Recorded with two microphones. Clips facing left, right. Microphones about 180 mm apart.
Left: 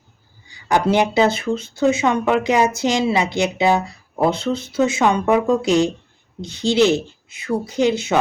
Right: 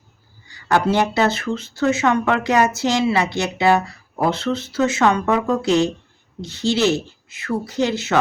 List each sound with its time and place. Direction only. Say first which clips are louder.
0.4 s speech: even; 15° left (ahead or behind)